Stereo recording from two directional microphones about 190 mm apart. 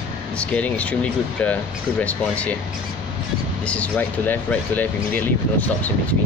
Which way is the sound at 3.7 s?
10° left (ahead or behind).